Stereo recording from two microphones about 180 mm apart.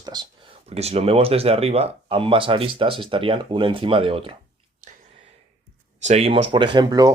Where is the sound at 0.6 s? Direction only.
35° right (ahead or behind).